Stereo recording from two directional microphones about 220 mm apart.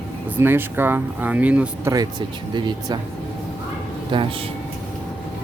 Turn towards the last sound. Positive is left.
turn(degrees=-20)  # may be behind; listen again after turning